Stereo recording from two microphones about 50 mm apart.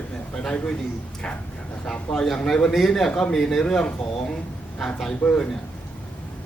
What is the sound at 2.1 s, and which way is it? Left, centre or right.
Speech, centre.